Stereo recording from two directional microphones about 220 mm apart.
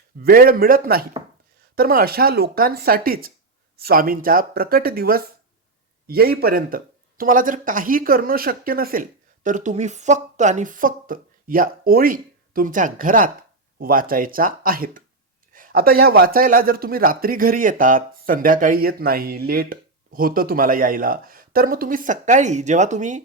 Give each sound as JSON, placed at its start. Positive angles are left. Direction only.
{"t": 0.2, "sound": "speech", "side_deg": -45}